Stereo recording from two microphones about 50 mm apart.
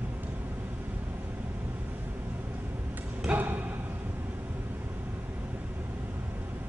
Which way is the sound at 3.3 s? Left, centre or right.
Right.